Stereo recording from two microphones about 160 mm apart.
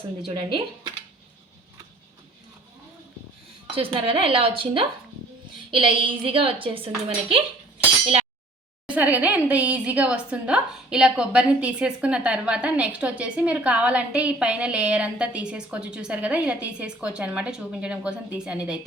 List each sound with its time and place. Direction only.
0.3 s a woman's voice: 35° right (ahead or behind)
3.8 s a woman's voice: 35° right (ahead or behind)
8.9 s a woman's voice: 10° right (ahead or behind)